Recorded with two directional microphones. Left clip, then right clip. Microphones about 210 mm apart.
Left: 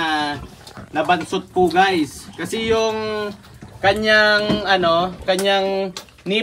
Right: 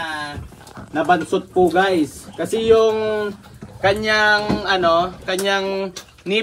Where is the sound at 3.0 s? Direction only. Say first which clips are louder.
Right 3 dB; centre (ahead or behind).